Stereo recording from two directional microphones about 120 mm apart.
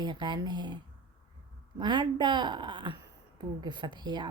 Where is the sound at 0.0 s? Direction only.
40° right (ahead or behind).